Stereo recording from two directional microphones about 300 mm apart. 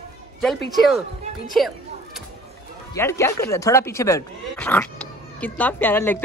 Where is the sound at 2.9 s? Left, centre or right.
Centre.